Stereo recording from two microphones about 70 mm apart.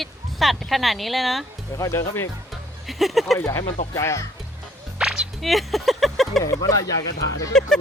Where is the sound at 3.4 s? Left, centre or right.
Left.